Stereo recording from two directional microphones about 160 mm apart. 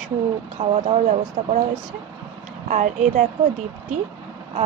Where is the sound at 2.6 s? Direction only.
50° right (ahead or behind).